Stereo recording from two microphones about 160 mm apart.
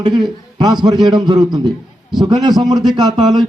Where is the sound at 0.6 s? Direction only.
25° right (ahead or behind).